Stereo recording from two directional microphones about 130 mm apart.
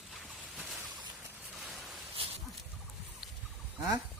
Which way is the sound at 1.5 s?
Centre (ahead or behind).